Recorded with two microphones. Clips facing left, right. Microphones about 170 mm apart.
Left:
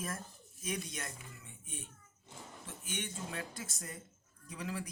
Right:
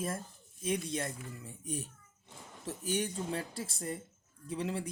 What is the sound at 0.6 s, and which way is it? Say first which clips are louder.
Speech: right 7 dB; 30° right (ahead or behind).